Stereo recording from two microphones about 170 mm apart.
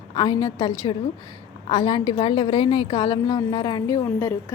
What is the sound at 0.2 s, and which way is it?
A woman's voice, 25° left (ahead or behind).